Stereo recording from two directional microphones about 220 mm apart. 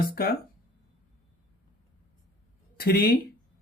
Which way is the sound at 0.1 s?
45° left (ahead or behind).